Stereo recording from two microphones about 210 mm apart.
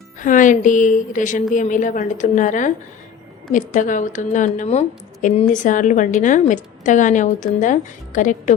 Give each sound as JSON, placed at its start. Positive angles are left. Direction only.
{"t": 0.2, "sound": "a woman's voice", "side_deg": 40}